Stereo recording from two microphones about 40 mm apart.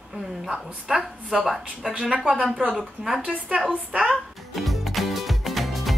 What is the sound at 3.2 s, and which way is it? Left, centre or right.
Speech, right.